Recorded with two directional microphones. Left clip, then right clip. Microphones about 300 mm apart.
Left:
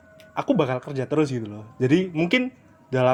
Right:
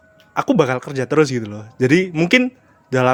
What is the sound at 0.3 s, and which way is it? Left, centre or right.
Speech, right.